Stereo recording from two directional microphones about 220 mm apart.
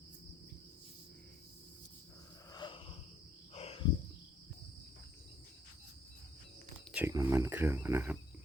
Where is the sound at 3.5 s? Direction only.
25° left (ahead or behind).